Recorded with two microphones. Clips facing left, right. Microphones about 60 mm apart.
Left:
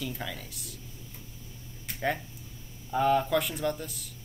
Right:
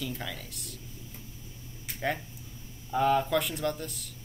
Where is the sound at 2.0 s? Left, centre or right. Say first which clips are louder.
Left 1 dB; centre.